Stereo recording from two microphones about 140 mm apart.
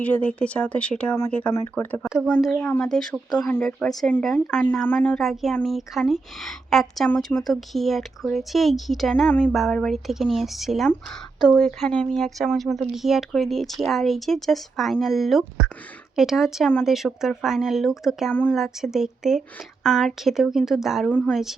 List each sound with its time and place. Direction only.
0.0 s speech: 10° left (ahead or behind)
2.0 s speech: 5° right (ahead or behind)
2.6 s speech: 15° left (ahead or behind)
2.8 s speech: 5° left (ahead or behind)
21.1 s speech: 10° left (ahead or behind)